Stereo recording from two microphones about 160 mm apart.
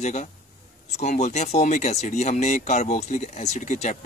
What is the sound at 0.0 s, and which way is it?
Speech, 45° left (ahead or behind).